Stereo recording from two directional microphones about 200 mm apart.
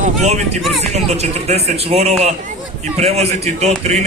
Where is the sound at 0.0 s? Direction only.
35° right (ahead or behind).